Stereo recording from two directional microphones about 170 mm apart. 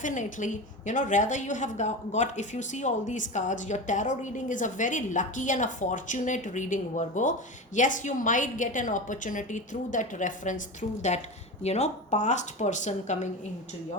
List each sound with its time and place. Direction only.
0.0 s a woman's voice: 50° left (ahead or behind)